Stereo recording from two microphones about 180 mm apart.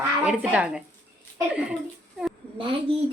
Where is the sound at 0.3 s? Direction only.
5° right (ahead or behind).